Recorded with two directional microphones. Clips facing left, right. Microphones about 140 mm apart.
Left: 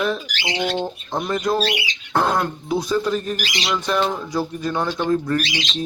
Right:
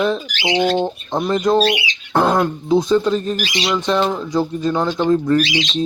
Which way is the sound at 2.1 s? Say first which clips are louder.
Right 4 dB; 10° right (ahead or behind).